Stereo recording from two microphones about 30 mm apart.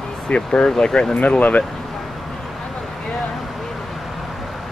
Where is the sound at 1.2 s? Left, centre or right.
Left.